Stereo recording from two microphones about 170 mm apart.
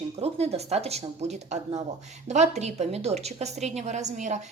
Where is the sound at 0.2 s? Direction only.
40° right (ahead or behind).